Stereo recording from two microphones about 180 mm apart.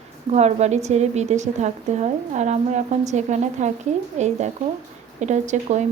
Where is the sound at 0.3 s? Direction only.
40° right (ahead or behind).